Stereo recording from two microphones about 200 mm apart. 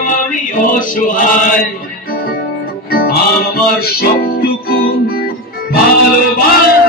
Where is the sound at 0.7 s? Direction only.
40° left (ahead or behind).